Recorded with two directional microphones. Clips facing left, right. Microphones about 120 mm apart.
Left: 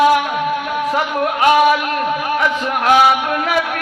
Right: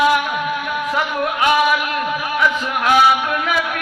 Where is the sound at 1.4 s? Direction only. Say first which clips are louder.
Left 4 dB; 40° left (ahead or behind).